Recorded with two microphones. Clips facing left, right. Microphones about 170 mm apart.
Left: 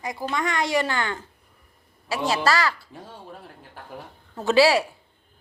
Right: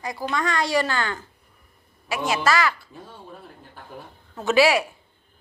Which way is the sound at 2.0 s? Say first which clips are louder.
Even; 35° left (ahead or behind).